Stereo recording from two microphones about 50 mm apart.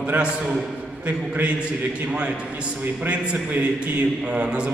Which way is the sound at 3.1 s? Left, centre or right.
Right.